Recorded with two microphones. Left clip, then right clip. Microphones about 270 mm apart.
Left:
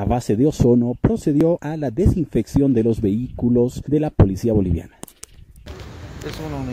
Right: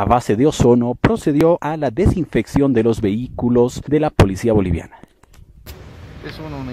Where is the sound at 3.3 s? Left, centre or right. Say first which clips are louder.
Right 5 dB; right.